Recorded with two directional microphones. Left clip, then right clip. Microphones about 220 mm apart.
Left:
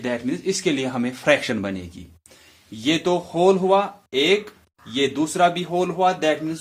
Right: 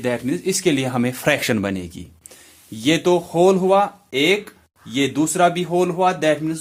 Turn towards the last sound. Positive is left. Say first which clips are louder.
# right 2 dB
turn(degrees=-40)  # may be behind; listen again after turning